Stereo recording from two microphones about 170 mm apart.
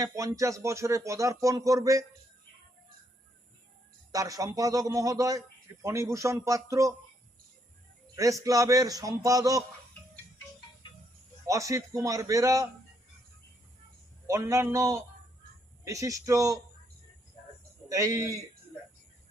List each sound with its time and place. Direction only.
0.0 s speech: 20° right (ahead or behind)
4.1 s a man's voice: 20° right (ahead or behind)
8.1 s speech: 20° right (ahead or behind)
11.4 s speech: 20° right (ahead or behind)
14.3 s a man's voice: 20° right (ahead or behind)
17.8 s speech: 20° right (ahead or behind)